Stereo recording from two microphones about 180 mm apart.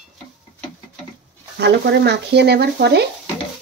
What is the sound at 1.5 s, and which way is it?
Speech, 65° right (ahead or behind).